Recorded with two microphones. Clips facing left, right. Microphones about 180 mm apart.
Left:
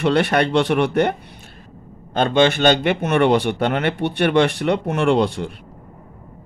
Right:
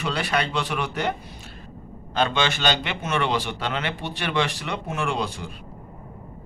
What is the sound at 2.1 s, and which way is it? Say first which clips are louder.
Speech: left 7 dB; 50° left (ahead or behind).